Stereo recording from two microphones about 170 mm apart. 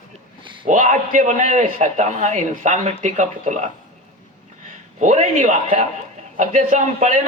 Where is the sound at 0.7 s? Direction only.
50° right (ahead or behind).